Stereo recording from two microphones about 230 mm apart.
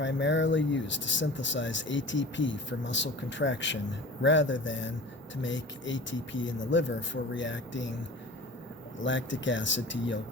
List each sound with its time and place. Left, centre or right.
0.0 s speech: left
9.0 s speech: left